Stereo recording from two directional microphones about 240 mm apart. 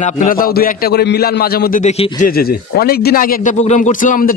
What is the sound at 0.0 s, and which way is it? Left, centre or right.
A man's voice, left.